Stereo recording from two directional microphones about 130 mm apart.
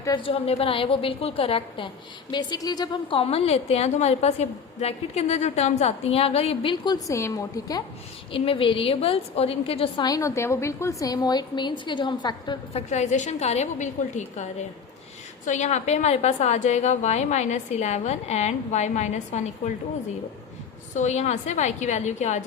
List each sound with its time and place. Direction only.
0.2 s a woman's voice: 50° left (ahead or behind)
2.3 s a woman's voice: 35° left (ahead or behind)
7.1 s a woman's voice: 25° left (ahead or behind)
8.3 s a woman's voice: 45° left (ahead or behind)
10.0 s a woman's voice: 25° left (ahead or behind)
12.7 s a woman's voice: 60° left (ahead or behind)
15.4 s a woman's voice: 65° left (ahead or behind)
20.9 s a woman's voice: 60° left (ahead or behind)